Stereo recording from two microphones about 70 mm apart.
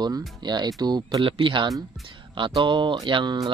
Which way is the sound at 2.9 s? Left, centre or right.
Right.